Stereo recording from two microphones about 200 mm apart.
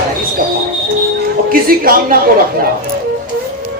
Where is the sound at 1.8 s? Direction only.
45° right (ahead or behind).